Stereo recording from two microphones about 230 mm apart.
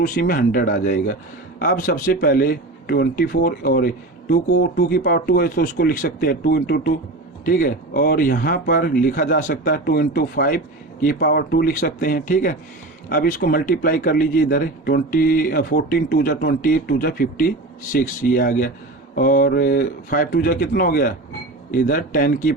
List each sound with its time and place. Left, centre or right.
0.0 s a man's voice: left